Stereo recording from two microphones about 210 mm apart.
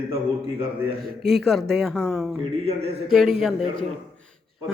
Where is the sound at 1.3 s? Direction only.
Centre (ahead or behind).